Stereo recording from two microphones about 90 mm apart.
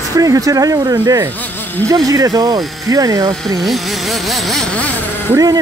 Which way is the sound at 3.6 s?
Centre (ahead or behind).